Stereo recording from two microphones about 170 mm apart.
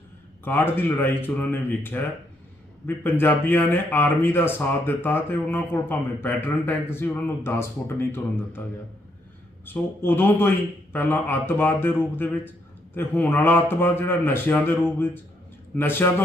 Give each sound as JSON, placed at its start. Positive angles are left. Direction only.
{"t": 0.4, "sound": "speech", "side_deg": 10}
{"t": 9.6, "sound": "speech", "side_deg": 10}